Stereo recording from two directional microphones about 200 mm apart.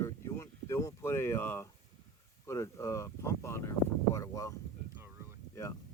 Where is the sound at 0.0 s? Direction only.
15° left (ahead or behind).